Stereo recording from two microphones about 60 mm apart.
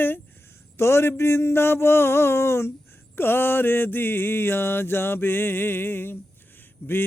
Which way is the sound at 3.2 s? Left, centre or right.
Left.